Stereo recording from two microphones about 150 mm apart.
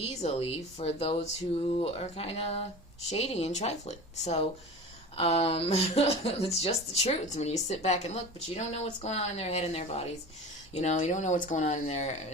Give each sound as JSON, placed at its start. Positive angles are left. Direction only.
{"t": 0.0, "sound": "speech", "side_deg": 45}